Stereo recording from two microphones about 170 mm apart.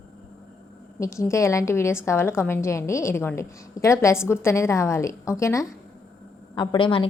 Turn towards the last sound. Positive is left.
turn(degrees=30)  # may be behind; listen again after turning